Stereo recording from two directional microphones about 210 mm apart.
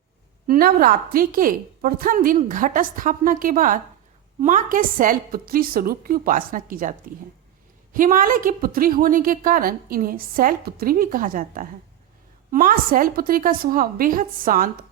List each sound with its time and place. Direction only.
0.4 s a woman's voice: 45° right (ahead or behind)